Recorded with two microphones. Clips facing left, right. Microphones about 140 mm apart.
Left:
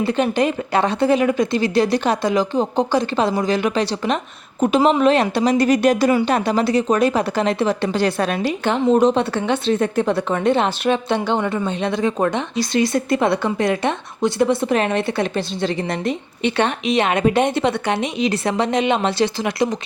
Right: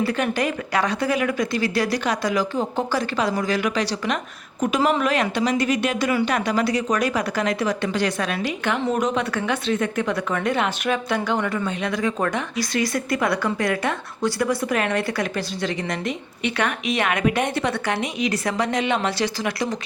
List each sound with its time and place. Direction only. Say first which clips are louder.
0.0 s a woman's voice: left 4 dB; 25° left (ahead or behind)